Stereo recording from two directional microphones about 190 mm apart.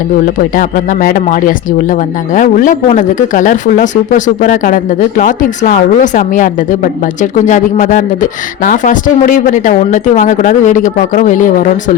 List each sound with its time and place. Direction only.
0.3 s speech: 45° left (ahead or behind)